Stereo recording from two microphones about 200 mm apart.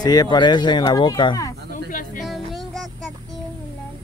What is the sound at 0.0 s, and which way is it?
Speech, 20° left (ahead or behind).